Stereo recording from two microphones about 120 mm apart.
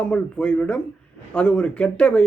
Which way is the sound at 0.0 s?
10° left (ahead or behind).